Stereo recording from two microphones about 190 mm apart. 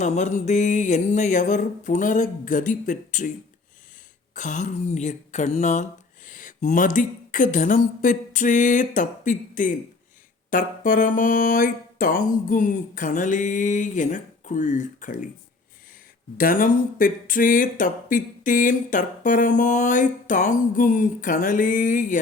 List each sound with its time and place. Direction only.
0.0 s speech: 40° left (ahead or behind)
4.4 s speech: 40° left (ahead or behind)
16.4 s speech: 50° left (ahead or behind)